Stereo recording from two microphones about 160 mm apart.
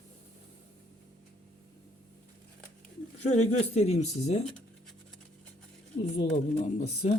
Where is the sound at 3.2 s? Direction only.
40° left (ahead or behind).